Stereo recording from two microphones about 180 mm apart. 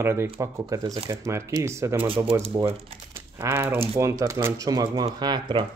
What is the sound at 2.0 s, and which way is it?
Speech, 30° right (ahead or behind).